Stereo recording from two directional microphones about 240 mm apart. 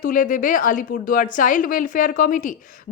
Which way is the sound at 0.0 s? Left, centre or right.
Left.